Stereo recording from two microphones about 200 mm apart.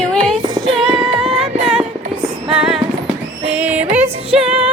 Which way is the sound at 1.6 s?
5° right (ahead or behind).